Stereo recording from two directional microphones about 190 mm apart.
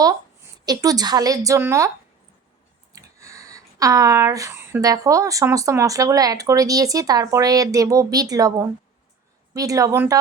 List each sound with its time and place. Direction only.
0.6 s a woman's voice: 20° right (ahead or behind)
2.9 s speech: 15° right (ahead or behind)